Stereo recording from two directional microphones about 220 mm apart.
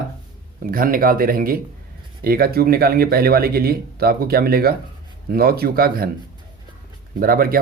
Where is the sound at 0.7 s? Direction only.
40° right (ahead or behind).